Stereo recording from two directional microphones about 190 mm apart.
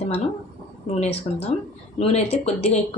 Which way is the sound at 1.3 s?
35° left (ahead or behind).